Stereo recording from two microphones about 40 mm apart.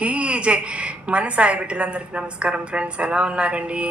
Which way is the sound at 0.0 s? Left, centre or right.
Right.